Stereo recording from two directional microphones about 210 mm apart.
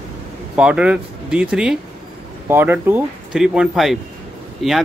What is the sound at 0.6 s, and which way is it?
Speech, 5° right (ahead or behind).